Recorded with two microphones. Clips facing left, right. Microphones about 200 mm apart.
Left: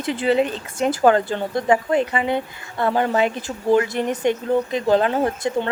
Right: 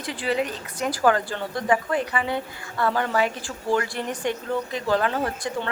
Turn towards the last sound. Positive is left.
turn(degrees=20)  # may be behind; listen again after turning